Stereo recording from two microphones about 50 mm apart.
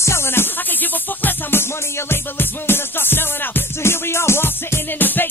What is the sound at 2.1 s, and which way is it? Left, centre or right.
Music, left.